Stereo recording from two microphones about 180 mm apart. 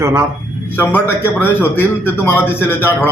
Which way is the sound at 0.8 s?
10° left (ahead or behind).